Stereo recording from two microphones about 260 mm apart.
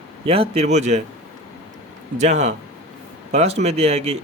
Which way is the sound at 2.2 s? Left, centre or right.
Right.